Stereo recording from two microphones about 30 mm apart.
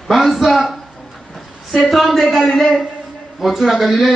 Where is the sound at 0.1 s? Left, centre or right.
Centre.